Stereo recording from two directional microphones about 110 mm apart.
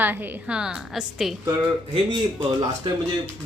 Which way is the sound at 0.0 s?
15° right (ahead or behind).